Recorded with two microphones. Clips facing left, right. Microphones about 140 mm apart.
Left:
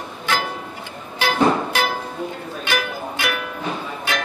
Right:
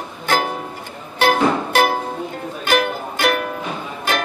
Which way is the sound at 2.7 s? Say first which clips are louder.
Right 6 dB; 50° right (ahead or behind).